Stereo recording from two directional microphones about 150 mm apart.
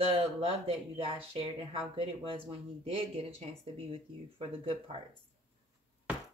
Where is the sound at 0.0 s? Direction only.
35° right (ahead or behind).